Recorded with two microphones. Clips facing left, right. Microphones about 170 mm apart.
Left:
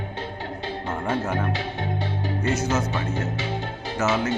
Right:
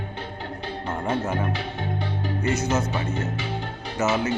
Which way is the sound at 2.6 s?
20° right (ahead or behind).